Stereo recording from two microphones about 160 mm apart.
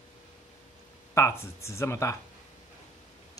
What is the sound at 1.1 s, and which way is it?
Speech, 15° left (ahead or behind).